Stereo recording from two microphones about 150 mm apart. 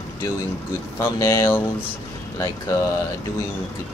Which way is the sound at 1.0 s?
20° left (ahead or behind).